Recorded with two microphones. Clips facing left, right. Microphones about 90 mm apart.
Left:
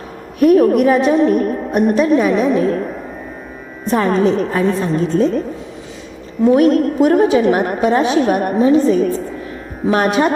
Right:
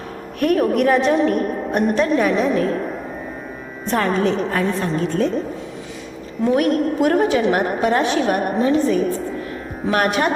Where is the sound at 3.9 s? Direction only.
15° left (ahead or behind).